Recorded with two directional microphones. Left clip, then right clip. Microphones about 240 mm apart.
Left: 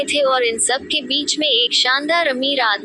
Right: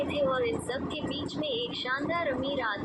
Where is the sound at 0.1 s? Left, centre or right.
Left.